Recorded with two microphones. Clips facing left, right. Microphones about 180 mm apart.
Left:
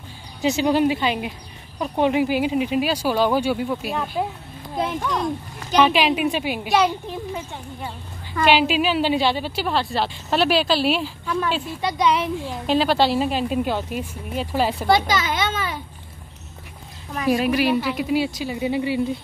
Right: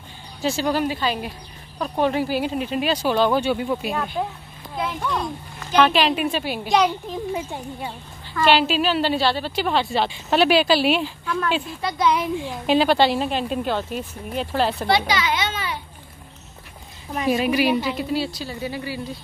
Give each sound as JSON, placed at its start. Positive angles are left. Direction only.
{"t": 0.4, "sound": "a woman's voice", "side_deg": 20}
{"t": 5.8, "sound": "speech", "side_deg": 10}
{"t": 7.1, "sound": "speech", "side_deg": -15}
{"t": 8.5, "sound": "speech", "side_deg": 10}
{"t": 9.7, "sound": "a woman's voice", "side_deg": 0}
{"t": 14.9, "sound": "a sound", "side_deg": 45}
{"t": 17.3, "sound": "a woman's voice", "side_deg": 0}
{"t": 17.9, "sound": "speech", "side_deg": 10}